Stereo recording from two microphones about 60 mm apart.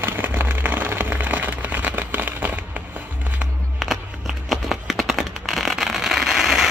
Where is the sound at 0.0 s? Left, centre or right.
Right.